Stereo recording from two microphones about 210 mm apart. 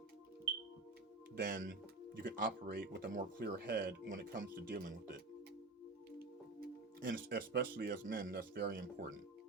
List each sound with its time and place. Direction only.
1.4 s speech: 40° right (ahead or behind)
7.1 s speech: 45° right (ahead or behind)